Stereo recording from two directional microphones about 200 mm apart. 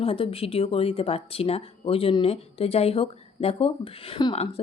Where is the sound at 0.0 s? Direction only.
30° left (ahead or behind).